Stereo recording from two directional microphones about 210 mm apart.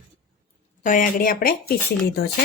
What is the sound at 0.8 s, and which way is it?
Speech, 40° left (ahead or behind).